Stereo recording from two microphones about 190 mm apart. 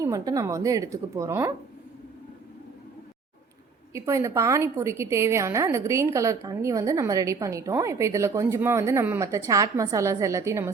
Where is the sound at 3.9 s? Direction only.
15° right (ahead or behind).